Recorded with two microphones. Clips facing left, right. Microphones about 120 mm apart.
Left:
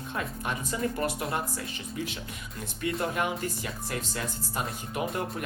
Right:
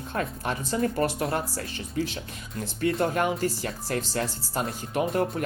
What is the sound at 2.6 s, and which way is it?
Speech, 35° right (ahead or behind).